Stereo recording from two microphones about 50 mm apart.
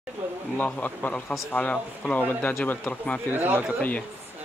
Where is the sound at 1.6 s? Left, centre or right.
Left.